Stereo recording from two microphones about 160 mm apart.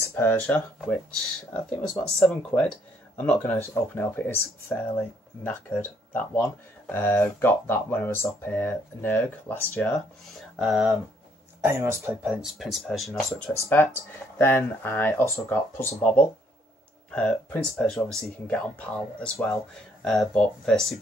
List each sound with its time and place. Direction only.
0.1 s speech: 15° left (ahead or behind)
10.6 s speech: 5° right (ahead or behind)
11.6 s speech: 15° right (ahead or behind)
12.3 s speech: 5° right (ahead or behind)